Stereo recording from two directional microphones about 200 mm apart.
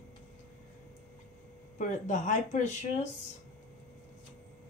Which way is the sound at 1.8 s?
40° left (ahead or behind).